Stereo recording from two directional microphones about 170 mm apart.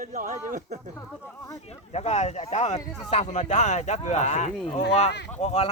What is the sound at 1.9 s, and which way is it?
Speech, 40° left (ahead or behind).